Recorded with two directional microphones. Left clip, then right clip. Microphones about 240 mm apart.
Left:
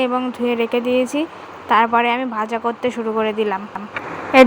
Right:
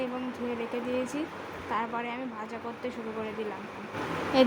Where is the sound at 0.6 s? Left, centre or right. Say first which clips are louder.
Left 14 dB; left.